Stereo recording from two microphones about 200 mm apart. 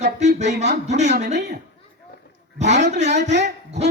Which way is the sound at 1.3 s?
60° right (ahead or behind).